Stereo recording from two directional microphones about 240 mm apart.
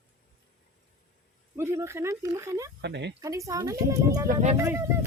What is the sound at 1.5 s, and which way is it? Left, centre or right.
Speech, centre.